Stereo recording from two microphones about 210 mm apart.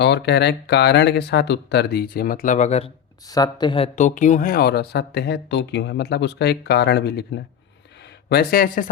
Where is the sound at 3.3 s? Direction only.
20° left (ahead or behind).